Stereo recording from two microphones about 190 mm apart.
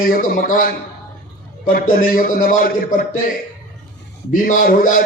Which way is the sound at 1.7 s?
50° left (ahead or behind).